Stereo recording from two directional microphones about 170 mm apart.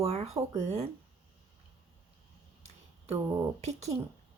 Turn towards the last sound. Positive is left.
turn(degrees=-40)  # may be behind; listen again after turning